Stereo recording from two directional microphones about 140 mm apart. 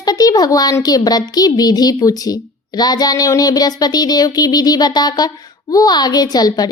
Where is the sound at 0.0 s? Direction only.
25° left (ahead or behind).